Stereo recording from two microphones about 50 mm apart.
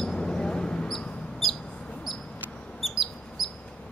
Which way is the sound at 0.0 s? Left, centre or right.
Centre.